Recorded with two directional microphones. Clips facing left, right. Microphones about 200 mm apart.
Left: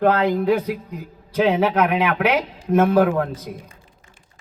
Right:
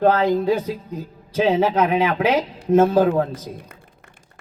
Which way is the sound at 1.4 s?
25° right (ahead or behind).